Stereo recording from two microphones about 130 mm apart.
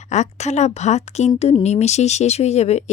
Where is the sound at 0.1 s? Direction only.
60° left (ahead or behind).